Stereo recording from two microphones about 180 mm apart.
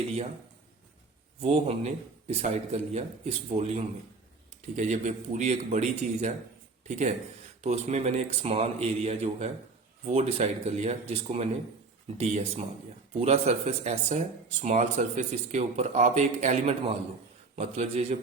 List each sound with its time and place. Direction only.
1.4 s speech: 35° right (ahead or behind)
4.8 s speech: 45° right (ahead or behind)